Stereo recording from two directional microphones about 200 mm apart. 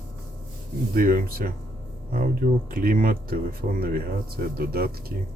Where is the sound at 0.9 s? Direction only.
45° right (ahead or behind).